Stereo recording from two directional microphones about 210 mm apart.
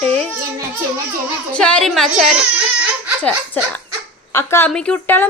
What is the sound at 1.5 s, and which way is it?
Speech, 5° left (ahead or behind).